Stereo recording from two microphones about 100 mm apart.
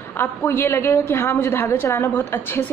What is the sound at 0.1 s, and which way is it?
A woman's voice, 20° left (ahead or behind).